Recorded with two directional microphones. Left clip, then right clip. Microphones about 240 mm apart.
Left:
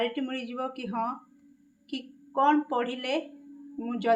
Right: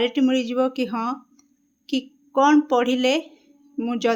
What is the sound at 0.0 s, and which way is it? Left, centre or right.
Speech, right.